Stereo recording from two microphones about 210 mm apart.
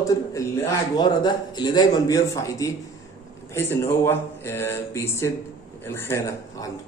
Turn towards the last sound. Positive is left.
turn(degrees=10)  # may be behind; listen again after turning